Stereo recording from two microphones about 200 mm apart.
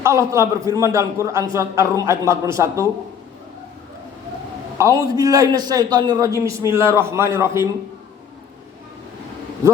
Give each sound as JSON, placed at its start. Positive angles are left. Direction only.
{"t": 0.0, "sound": "a man's voice", "side_deg": -15}
{"t": 4.8, "sound": "a man's voice", "side_deg": -15}